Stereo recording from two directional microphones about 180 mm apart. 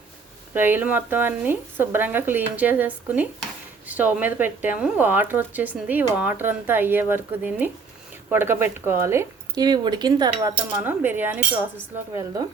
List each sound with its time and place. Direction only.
0.5 s speech: 10° right (ahead or behind)